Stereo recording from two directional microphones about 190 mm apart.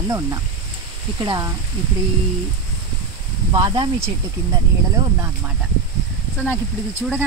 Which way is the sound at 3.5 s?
20° right (ahead or behind).